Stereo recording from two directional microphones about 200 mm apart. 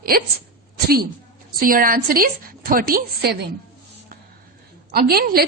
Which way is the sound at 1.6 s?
45° right (ahead or behind).